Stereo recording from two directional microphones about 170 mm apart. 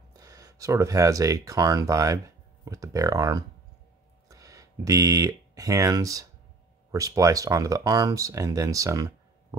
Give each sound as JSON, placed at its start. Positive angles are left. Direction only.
{"t": 0.1, "sound": "speech", "side_deg": -20}